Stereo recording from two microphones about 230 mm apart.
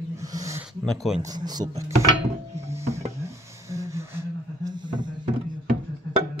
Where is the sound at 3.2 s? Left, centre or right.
Centre.